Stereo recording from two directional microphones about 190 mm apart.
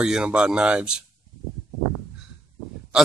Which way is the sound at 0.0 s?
5° right (ahead or behind).